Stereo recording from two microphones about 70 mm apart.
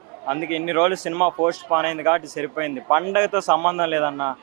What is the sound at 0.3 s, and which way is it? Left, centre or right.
A man's voice, right.